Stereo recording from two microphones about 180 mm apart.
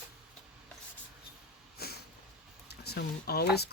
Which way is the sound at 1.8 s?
60° left (ahead or behind).